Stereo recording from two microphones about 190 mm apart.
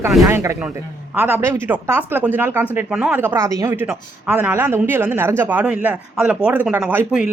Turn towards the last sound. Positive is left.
turn(degrees=-5)  # may be behind; listen again after turning